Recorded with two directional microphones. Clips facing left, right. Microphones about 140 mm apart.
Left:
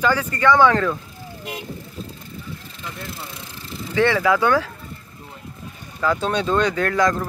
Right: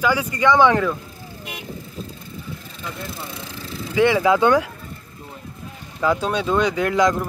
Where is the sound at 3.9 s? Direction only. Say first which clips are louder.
Right 2 dB; 15° right (ahead or behind).